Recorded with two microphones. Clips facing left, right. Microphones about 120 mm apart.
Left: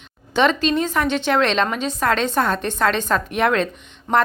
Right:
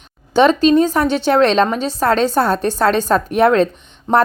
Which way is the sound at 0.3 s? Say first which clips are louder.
Right 7 dB; 35° right (ahead or behind).